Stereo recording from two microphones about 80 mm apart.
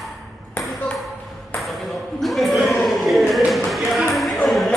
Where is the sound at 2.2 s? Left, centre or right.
Centre.